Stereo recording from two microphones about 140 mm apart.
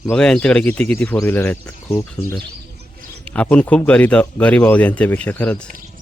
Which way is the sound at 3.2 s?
10° left (ahead or behind).